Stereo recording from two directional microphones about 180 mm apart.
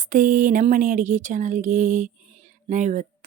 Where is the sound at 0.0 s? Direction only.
45° right (ahead or behind).